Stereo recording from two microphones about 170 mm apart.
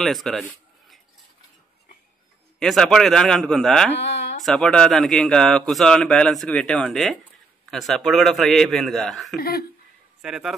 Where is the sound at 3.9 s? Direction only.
90° left.